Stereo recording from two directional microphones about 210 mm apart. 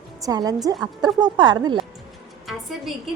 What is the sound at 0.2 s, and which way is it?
A woman's voice, 15° right (ahead or behind).